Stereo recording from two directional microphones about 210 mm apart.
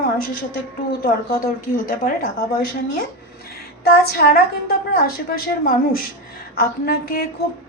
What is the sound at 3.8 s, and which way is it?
A woman's voice, 45° left (ahead or behind).